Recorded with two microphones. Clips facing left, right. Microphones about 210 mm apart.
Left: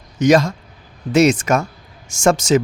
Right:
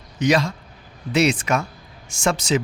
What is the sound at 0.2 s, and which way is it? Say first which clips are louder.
Speech: left 6 dB; 45° left (ahead or behind).